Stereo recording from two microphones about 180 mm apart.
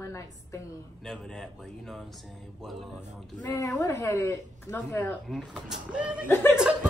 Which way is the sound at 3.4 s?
20° left (ahead or behind).